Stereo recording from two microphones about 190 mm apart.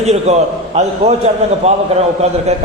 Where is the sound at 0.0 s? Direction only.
35° right (ahead or behind).